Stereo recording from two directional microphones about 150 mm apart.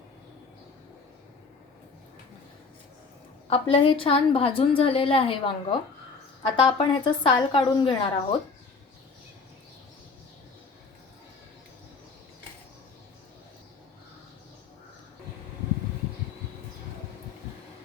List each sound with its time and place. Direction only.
3.5 s a woman's voice: 40° left (ahead or behind)